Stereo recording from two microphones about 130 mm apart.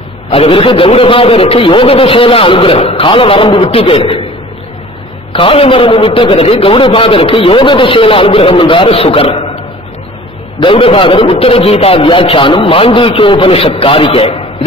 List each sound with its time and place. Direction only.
0.3 s a man's voice: 45° left (ahead or behind)
5.3 s a man's voice: 45° left (ahead or behind)
10.6 s a man's voice: 40° left (ahead or behind)